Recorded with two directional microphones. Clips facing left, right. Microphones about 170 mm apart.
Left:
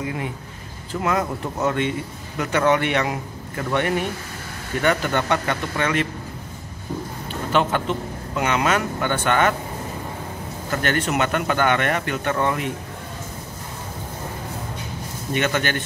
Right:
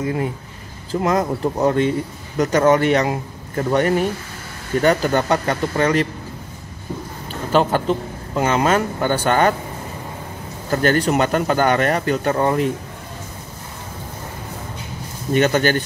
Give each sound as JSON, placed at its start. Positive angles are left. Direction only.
{"t": 1.0, "sound": "a man's voice", "side_deg": -35}
{"t": 7.5, "sound": "a man's voice", "side_deg": -35}
{"t": 10.7, "sound": "a man's voice", "side_deg": -35}
{"t": 15.3, "sound": "a man's voice", "side_deg": -40}